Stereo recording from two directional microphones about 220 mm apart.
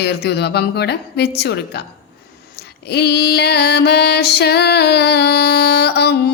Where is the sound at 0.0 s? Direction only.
50° left (ahead or behind).